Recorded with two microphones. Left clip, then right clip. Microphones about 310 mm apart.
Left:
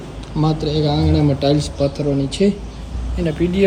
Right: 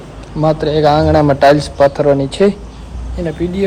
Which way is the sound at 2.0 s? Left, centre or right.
Centre.